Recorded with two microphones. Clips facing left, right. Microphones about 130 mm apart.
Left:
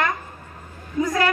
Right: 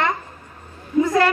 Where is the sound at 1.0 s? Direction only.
25° right (ahead or behind).